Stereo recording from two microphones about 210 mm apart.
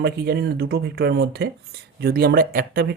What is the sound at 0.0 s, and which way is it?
Speech, 50° right (ahead or behind).